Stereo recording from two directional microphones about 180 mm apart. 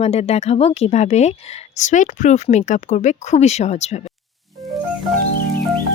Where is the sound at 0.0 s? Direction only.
35° left (ahead or behind).